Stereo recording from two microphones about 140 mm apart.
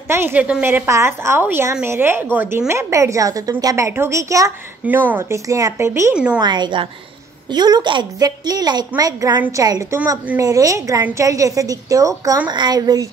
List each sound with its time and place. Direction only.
0.1 s a woman's voice: 15° right (ahead or behind)
6.1 s a woman's voice: 10° right (ahead or behind)
6.4 s a woman's voice: 30° right (ahead or behind); by 10.4 s 15° right (ahead or behind)
10.4 s a woman's voice: 25° right (ahead or behind)